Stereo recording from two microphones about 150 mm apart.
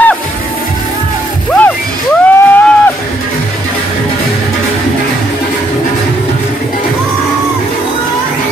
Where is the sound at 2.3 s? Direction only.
10° left (ahead or behind).